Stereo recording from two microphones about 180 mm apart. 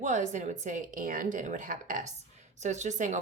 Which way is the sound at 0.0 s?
40° right (ahead or behind).